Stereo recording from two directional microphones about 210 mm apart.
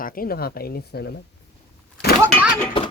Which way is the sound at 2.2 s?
5° right (ahead or behind).